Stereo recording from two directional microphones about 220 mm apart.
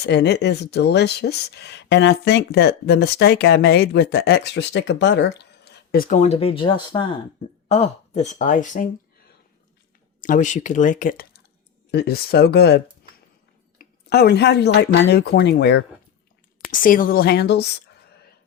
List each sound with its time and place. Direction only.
0.0 s speech: 50° left (ahead or behind)
10.2 s speech: 35° left (ahead or behind)
11.9 s speech: 50° left (ahead or behind)
16.6 s speech: 40° left (ahead or behind)